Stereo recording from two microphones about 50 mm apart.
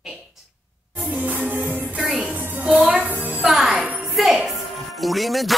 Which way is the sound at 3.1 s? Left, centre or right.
Right.